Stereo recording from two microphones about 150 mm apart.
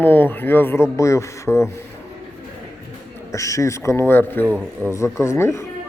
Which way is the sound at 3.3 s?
20° left (ahead or behind).